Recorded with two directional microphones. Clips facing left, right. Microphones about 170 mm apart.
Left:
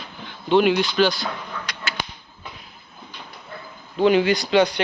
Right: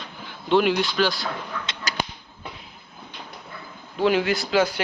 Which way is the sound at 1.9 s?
40° right (ahead or behind).